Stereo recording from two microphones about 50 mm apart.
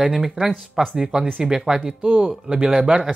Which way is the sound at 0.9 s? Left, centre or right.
Centre.